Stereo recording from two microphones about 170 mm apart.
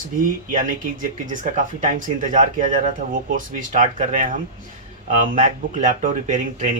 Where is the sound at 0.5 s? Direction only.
50° right (ahead or behind).